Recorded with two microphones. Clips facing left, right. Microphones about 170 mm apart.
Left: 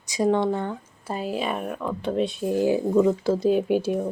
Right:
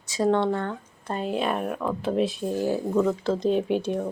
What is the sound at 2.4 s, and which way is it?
Speech, 15° left (ahead or behind).